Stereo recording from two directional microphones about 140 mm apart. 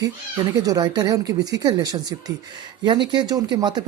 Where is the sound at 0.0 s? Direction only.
25° right (ahead or behind).